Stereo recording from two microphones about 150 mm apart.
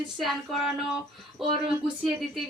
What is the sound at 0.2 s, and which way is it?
Speech, centre (ahead or behind).